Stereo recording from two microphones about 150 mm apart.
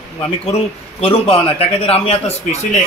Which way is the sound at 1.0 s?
40° left (ahead or behind).